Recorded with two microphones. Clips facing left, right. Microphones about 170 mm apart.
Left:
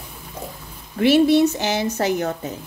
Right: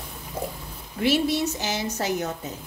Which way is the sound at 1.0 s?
60° left (ahead or behind).